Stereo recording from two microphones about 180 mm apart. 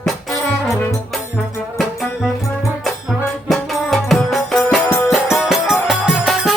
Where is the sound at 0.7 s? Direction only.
15° left (ahead or behind).